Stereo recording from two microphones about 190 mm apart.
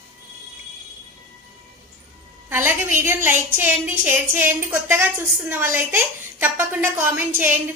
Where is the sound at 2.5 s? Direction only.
10° right (ahead or behind).